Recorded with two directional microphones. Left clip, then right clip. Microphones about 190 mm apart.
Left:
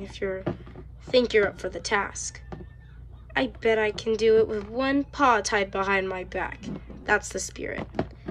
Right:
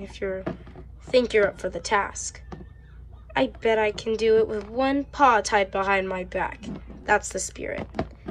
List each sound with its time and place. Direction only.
0.0 s speech: 5° left (ahead or behind)
1.5 s speech: centre (ahead or behind)